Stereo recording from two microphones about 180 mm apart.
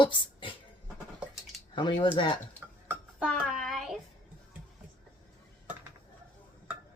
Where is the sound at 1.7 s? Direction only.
25° left (ahead or behind).